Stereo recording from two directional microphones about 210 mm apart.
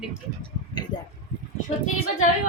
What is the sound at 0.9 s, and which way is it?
Speech, 20° left (ahead or behind).